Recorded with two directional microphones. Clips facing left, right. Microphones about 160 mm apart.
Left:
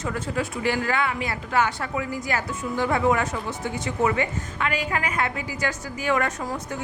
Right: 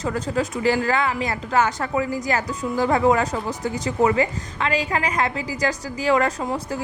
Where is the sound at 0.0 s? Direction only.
35° right (ahead or behind).